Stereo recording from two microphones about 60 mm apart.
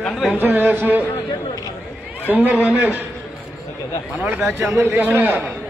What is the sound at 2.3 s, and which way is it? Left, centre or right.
Speech, right.